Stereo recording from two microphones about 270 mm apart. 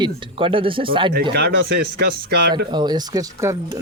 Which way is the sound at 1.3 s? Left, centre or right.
Right.